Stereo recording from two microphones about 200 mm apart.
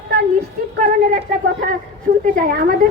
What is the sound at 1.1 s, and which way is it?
Speech, 40° right (ahead or behind).